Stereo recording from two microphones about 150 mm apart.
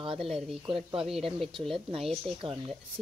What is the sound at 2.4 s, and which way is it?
Speech, 35° right (ahead or behind).